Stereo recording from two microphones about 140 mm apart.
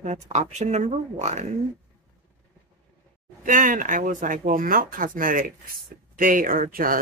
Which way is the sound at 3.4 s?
70° right (ahead or behind).